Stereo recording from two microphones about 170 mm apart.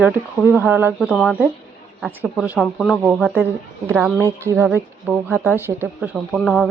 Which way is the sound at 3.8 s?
15° right (ahead or behind).